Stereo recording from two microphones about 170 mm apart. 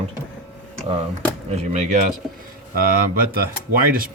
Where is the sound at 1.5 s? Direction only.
45° right (ahead or behind).